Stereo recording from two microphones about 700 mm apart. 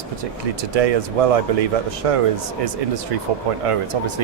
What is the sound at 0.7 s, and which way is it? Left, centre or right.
Speech, right.